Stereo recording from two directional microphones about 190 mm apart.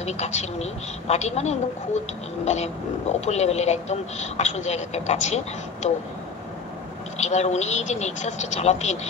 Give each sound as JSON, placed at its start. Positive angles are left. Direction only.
{"t": 0.0, "sound": "speech", "side_deg": 35}
{"t": 7.2, "sound": "speech", "side_deg": 35}